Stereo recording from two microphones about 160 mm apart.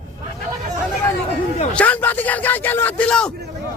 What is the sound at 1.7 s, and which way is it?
Speech, 10° left (ahead or behind).